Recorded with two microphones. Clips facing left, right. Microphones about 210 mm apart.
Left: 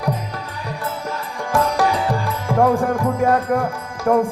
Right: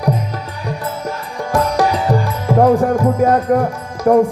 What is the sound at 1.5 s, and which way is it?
Music, 40° right (ahead or behind).